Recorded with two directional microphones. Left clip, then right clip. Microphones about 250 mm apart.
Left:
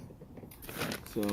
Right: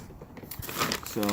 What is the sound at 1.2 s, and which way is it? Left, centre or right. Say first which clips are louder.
Speech: right 4 dB; right.